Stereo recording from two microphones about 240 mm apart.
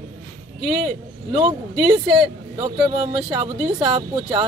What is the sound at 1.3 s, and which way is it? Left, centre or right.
Speech, right.